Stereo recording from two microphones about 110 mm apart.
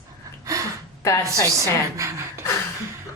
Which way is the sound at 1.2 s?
30° right (ahead or behind).